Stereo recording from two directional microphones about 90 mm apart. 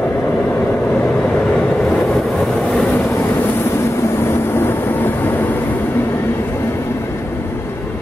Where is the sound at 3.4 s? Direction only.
25° left (ahead or behind).